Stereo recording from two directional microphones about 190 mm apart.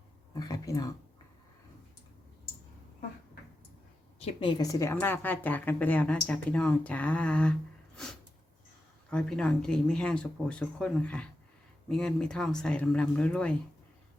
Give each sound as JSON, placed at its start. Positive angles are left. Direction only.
{"t": 0.3, "sound": "speech", "side_deg": 20}
{"t": 4.2, "sound": "speech", "side_deg": 30}
{"t": 9.0, "sound": "speech", "side_deg": 5}